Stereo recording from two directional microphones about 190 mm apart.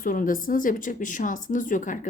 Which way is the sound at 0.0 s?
45° left (ahead or behind).